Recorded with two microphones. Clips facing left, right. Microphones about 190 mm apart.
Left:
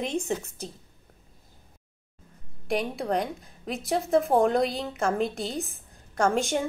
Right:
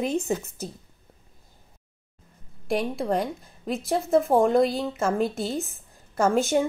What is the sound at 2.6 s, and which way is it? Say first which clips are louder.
A woman's voice: right 2 dB; centre (ahead or behind).